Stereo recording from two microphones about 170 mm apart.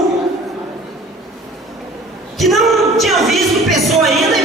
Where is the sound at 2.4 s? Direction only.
Centre (ahead or behind).